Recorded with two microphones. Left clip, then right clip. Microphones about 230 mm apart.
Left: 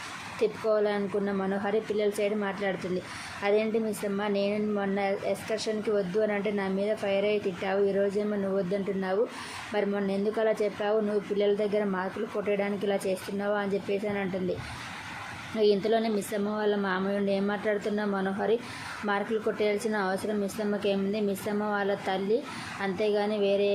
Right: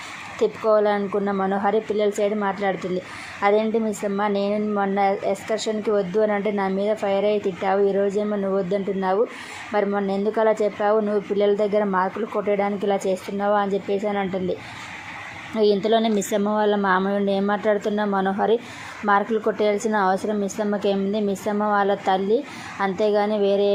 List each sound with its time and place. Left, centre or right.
0.4 s a woman's voice: centre
15.5 s a woman's voice: centre